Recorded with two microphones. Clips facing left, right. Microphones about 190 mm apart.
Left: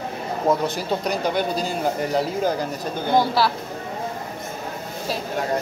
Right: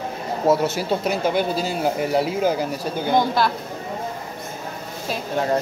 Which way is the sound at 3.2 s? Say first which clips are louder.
Left 1 dB; 5° left (ahead or behind).